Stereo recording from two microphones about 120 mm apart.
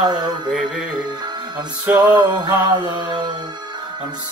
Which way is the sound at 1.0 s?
35° right (ahead or behind).